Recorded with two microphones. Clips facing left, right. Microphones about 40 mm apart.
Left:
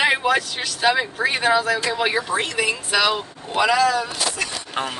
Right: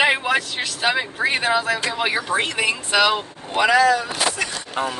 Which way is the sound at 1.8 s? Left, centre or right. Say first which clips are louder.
Left 1 dB; right.